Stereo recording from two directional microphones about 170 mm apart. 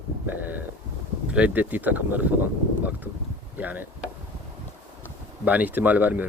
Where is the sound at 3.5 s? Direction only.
10° right (ahead or behind).